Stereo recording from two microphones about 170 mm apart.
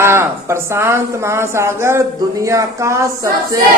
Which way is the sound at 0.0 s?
15° right (ahead or behind).